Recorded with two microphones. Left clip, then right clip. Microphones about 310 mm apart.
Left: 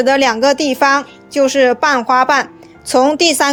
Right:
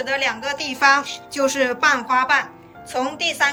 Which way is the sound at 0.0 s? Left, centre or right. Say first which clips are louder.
Left 11 dB; centre.